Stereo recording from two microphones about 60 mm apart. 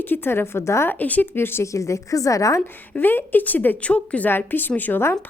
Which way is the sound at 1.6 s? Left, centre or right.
Left.